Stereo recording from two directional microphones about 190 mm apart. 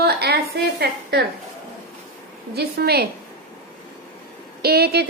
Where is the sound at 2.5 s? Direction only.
55° right (ahead or behind).